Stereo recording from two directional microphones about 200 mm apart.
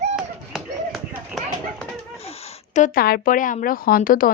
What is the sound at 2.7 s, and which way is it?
Speech, 40° left (ahead or behind).